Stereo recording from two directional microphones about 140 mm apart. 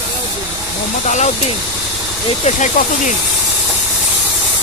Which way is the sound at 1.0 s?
55° left (ahead or behind).